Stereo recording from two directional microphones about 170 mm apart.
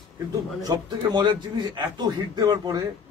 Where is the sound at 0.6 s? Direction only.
20° right (ahead or behind).